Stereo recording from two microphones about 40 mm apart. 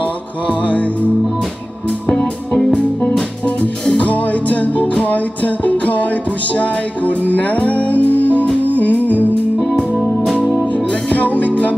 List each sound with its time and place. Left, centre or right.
0.0 s music: left
2.0 s music: centre
3.4 s music: left
9.6 s music: centre
11.1 s music: left